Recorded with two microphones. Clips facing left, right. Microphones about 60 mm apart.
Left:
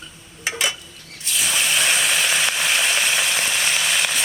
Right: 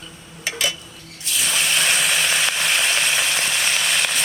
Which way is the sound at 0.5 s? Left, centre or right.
Left.